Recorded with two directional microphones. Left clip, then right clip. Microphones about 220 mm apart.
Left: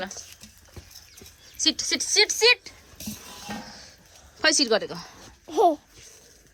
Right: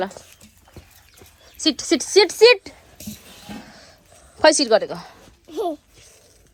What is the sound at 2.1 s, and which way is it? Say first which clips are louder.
Speech: right 7 dB; 10° right (ahead or behind).